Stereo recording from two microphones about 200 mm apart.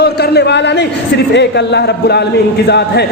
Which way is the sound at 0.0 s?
55° left (ahead or behind).